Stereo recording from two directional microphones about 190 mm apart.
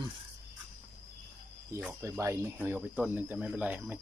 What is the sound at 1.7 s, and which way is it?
Speech, 10° right (ahead or behind).